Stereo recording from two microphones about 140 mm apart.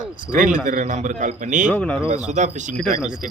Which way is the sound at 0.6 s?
60° right (ahead or behind).